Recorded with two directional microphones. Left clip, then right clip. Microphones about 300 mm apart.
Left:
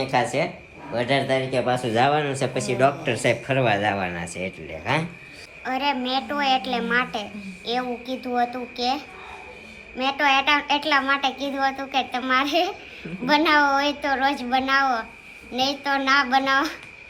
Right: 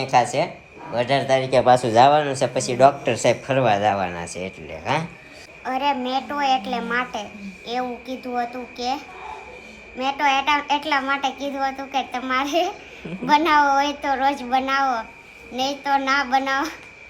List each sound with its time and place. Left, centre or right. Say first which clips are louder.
0.0 s a woman's voice: right 3 dB; centre